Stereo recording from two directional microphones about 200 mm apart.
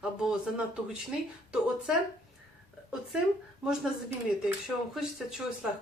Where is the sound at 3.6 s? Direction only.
5° right (ahead or behind).